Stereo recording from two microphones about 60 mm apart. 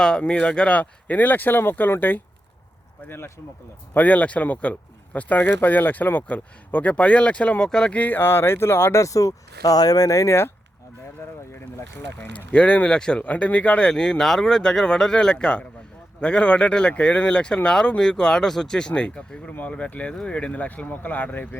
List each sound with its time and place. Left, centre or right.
0.0 s speech: centre; by 3.3 s left
3.9 s speech: left
9.0 s speech: left
12.5 s speech: centre